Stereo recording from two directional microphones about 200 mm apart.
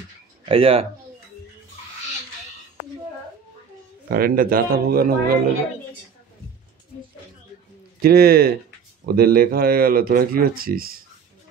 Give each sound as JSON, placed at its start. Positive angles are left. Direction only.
{"t": 0.5, "sound": "speech", "side_deg": -30}
{"t": 4.1, "sound": "speech", "side_deg": -45}
{"t": 8.0, "sound": "speech", "side_deg": -50}